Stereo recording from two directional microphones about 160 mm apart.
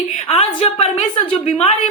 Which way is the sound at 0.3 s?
35° left (ahead or behind).